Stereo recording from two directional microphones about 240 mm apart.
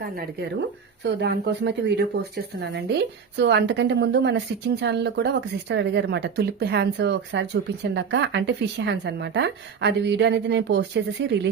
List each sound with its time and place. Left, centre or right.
1.0 s speech: right